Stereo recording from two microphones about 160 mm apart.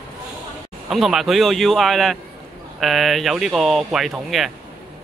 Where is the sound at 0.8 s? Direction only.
Centre (ahead or behind).